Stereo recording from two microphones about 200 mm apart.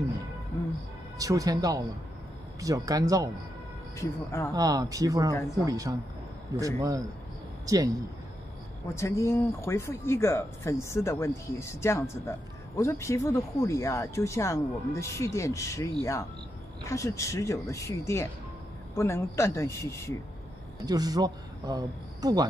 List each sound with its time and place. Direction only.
1.1 s speech: 15° right (ahead or behind)
4.0 s speech: 15° left (ahead or behind)
4.6 s speech: 20° right (ahead or behind)
8.8 s speech: 15° left (ahead or behind)
20.8 s speech: 20° right (ahead or behind)